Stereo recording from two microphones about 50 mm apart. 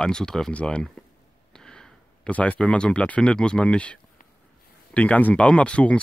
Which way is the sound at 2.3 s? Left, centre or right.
Left.